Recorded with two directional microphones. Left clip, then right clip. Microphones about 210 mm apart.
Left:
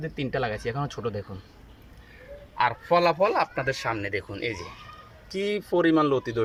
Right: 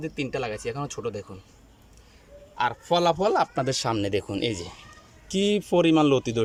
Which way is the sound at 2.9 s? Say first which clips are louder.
Even; 20° right (ahead or behind).